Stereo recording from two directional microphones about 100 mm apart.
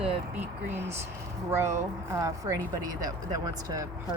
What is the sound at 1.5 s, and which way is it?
A woman's voice, 30° right (ahead or behind).